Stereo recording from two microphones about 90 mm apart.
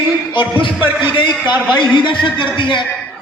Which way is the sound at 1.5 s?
60° left (ahead or behind).